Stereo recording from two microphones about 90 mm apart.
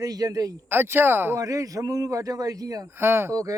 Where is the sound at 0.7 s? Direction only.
25° right (ahead or behind).